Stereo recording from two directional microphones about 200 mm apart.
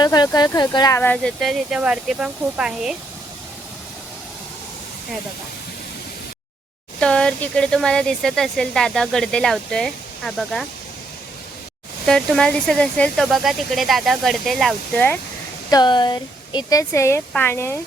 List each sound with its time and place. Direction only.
0.0 s speech: 20° left (ahead or behind); by 2.9 s 5° right (ahead or behind)
7.0 s speech: 5° left (ahead or behind)
12.0 s speech: 5° left (ahead or behind)
15.7 s speech: 20° left (ahead or behind)